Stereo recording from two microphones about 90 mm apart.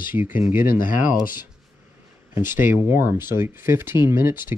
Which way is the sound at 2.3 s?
25° right (ahead or behind).